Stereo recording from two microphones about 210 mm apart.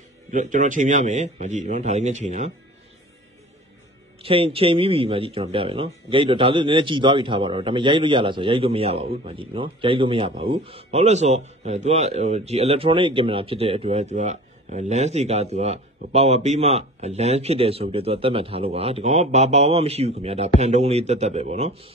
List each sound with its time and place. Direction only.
0.3 s a man's voice: 40° right (ahead or behind)
4.2 s a man's voice: 25° right (ahead or behind)